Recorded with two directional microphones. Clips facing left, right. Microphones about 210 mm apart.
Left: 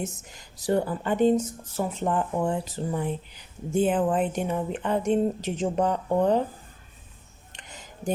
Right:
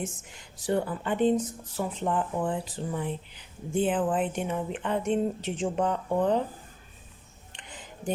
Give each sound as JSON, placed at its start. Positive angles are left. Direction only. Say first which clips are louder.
{"t": 0.0, "sound": "speech", "louder": "left 2 dB", "side_deg": 40}
{"t": 7.5, "sound": "music", "louder": "even", "side_deg": 40}